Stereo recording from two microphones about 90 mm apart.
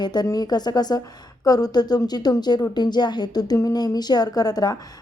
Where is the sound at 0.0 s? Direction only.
50° left (ahead or behind).